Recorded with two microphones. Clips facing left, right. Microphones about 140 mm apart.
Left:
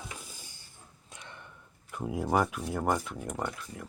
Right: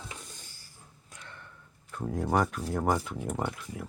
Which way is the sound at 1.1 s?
20° left (ahead or behind).